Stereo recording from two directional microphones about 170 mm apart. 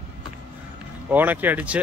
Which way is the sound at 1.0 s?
10° right (ahead or behind).